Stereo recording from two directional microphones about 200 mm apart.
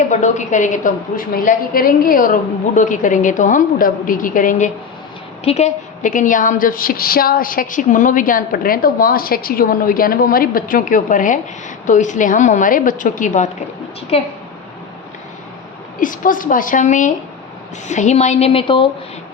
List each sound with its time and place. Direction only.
0.1 s a woman's voice: 35° left (ahead or behind)
16.0 s a woman's voice: 40° left (ahead or behind); by 18.9 s 25° left (ahead or behind)